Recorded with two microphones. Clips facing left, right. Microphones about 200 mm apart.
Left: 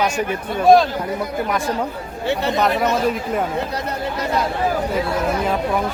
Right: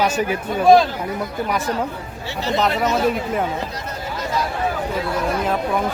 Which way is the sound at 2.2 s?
60° left (ahead or behind).